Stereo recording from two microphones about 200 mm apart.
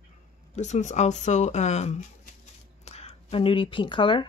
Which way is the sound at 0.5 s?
35° left (ahead or behind).